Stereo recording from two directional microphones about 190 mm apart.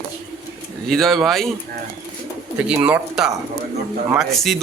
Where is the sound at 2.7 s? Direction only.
10° right (ahead or behind).